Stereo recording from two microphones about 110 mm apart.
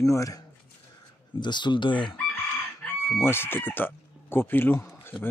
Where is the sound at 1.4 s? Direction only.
45° left (ahead or behind).